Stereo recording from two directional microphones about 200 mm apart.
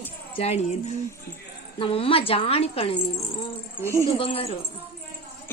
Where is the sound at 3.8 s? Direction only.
15° right (ahead or behind).